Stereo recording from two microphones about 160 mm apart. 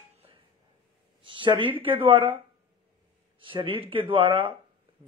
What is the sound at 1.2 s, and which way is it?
Speech, 30° right (ahead or behind).